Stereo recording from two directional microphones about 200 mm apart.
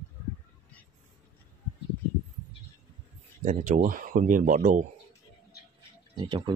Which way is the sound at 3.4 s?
40° right (ahead or behind).